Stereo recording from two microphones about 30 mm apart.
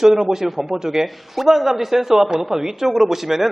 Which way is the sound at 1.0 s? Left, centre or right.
Centre.